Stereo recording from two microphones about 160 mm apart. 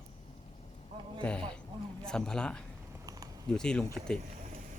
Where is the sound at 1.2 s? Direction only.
5° left (ahead or behind).